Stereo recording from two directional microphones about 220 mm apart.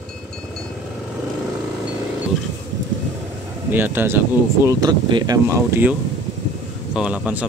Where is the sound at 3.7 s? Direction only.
10° right (ahead or behind).